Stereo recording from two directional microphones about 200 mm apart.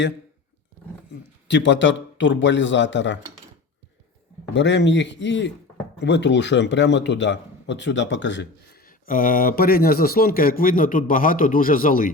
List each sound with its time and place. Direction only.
1.5 s a man's voice: 65° left (ahead or behind)
4.5 s a man's voice: 60° left (ahead or behind)
8.9 s speech: 45° left (ahead or behind)